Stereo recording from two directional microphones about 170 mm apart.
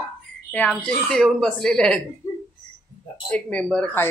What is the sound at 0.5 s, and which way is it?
Speech, 10° left (ahead or behind).